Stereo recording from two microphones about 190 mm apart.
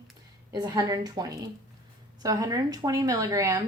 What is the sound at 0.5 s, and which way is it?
A woman's voice, 20° right (ahead or behind).